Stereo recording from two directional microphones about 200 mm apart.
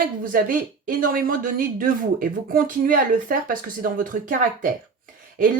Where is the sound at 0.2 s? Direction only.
45° right (ahead or behind).